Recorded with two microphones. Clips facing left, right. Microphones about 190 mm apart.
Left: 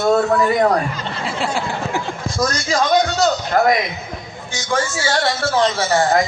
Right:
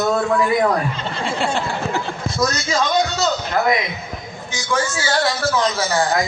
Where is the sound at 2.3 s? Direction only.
50° left (ahead or behind).